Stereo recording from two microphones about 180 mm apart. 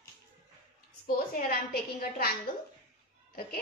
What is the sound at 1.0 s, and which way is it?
A woman's voice, 55° left (ahead or behind).